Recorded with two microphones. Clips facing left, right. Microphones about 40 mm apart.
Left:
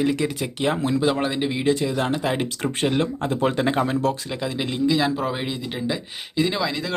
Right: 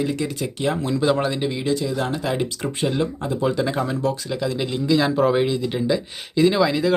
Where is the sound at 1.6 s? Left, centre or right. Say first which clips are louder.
Left 3 dB; left.